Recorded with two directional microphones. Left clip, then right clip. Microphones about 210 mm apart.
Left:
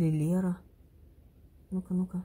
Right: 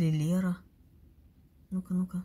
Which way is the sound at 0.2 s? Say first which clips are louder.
Left 1 dB; 20° right (ahead or behind).